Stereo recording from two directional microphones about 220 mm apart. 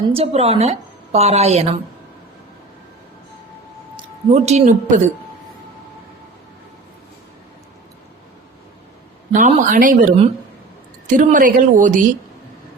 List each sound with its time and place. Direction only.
0.1 s a woman's voice: 25° right (ahead or behind)
3.9 s speech: 30° right (ahead or behind)
9.3 s speech: 35° right (ahead or behind)